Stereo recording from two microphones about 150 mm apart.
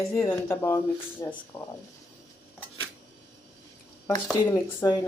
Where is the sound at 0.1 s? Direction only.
15° left (ahead or behind).